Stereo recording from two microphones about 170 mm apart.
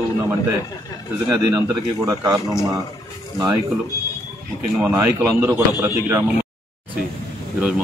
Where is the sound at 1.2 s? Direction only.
15° right (ahead or behind).